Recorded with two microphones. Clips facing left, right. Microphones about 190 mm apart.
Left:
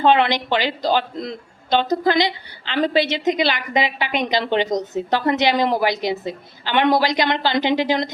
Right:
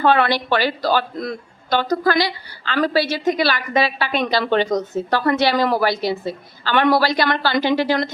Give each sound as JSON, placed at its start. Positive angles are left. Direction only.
{"t": 0.0, "sound": "speech", "side_deg": 20}